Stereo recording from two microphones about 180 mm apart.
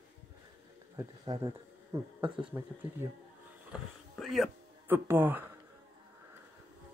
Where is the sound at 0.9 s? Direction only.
20° right (ahead or behind).